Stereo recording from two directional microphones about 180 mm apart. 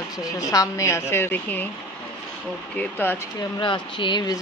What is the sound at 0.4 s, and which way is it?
A woman's voice, 20° left (ahead or behind).